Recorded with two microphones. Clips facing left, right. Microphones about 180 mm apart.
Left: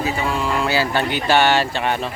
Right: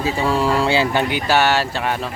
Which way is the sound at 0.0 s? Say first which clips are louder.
Right 3 dB; 35° right (ahead or behind).